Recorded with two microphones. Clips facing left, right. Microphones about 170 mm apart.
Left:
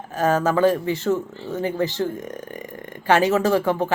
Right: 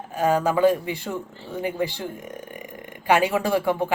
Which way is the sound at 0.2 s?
15° right (ahead or behind).